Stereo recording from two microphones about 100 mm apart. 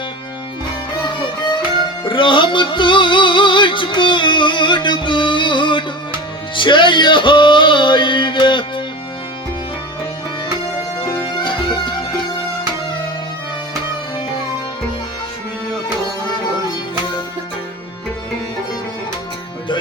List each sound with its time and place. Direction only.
1.0 s music: 50° left (ahead or behind)
11.3 s music: 50° left (ahead or behind)